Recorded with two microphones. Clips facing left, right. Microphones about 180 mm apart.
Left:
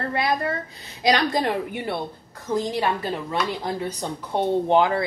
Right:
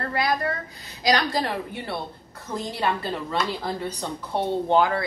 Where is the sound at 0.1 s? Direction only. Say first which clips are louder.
Even; 25° left (ahead or behind).